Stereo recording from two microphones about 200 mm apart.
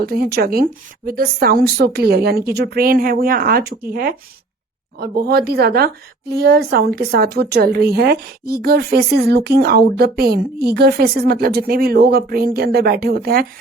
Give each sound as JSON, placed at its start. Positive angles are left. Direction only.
{"t": 0.0, "sound": "a woman's voice", "side_deg": -50}
{"t": 4.9, "sound": "a woman's voice", "side_deg": -50}